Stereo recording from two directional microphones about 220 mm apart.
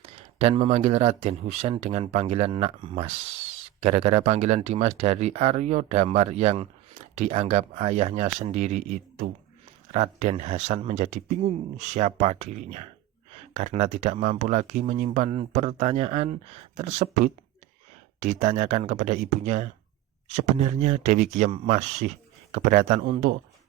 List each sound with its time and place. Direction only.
0.0 s speech: 25° right (ahead or behind)